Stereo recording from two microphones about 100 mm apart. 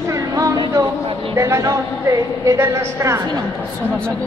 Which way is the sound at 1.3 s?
30° right (ahead or behind).